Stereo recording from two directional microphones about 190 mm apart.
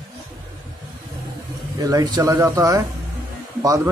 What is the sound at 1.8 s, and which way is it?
A man's voice, 20° right (ahead or behind).